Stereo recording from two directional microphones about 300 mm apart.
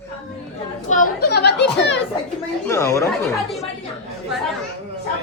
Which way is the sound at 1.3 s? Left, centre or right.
Left.